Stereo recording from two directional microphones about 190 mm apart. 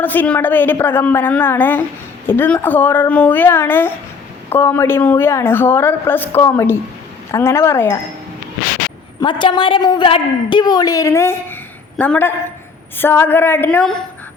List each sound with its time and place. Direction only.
0.0 s a woman's voice: 10° left (ahead or behind)
9.2 s a woman's voice: 25° left (ahead or behind); by 13.9 s 10° left (ahead or behind)